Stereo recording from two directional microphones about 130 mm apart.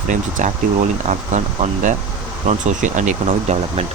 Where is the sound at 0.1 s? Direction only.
75° right (ahead or behind).